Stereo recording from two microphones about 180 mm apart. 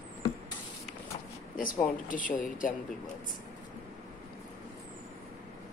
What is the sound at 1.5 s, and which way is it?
Speech, 50° left (ahead or behind).